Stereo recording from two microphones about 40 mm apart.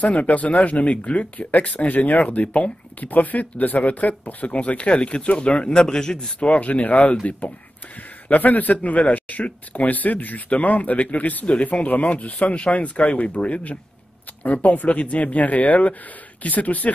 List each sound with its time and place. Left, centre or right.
0.0 s speech: left
3.1 s speech: left
5.7 s a man's voice: centre
6.4 s speech: left
11.4 s speech: left